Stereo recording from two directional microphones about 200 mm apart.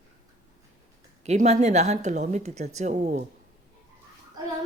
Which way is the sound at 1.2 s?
35° right (ahead or behind).